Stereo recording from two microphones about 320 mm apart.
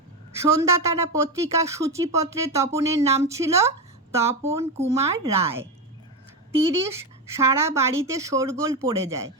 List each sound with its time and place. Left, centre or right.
0.4 s speech: centre
7.3 s speech: centre